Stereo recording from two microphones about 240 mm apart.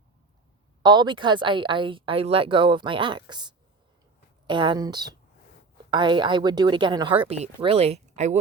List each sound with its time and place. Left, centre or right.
0.8 s a woman's voice: centre